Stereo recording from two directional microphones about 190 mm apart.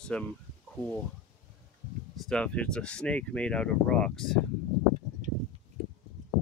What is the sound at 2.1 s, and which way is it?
Speech, 5° left (ahead or behind).